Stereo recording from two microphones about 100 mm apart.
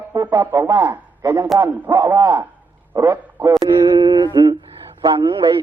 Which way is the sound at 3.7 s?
50° right (ahead or behind).